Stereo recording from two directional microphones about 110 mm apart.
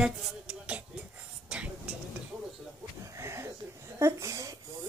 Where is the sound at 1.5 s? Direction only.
10° right (ahead or behind).